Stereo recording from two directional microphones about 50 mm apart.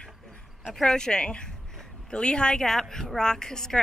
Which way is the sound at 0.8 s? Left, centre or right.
Centre.